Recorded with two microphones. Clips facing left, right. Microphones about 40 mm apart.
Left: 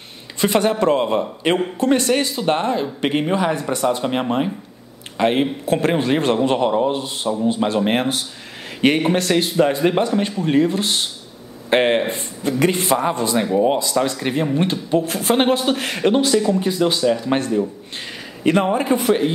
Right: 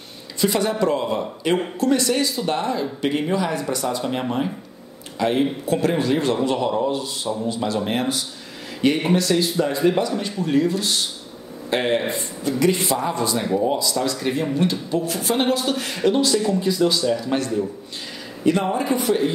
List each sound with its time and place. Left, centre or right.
0.4 s speech: left